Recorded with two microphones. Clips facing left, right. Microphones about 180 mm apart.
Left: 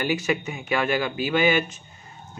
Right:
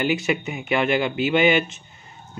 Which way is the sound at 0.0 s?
20° right (ahead or behind).